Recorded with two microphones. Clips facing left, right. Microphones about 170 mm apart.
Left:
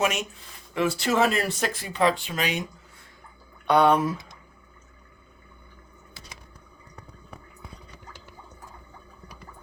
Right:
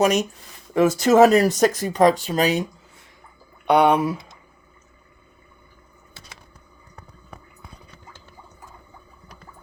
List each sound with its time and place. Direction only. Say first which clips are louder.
0.0 s speech: right 7 dB; 40° right (ahead or behind)
3.7 s speech: right 3 dB; 15° right (ahead or behind)